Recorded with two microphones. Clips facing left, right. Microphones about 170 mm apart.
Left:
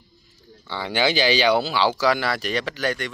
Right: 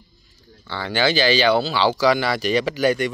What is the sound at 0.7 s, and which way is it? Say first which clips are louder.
Speech: right 1 dB; 10° left (ahead or behind).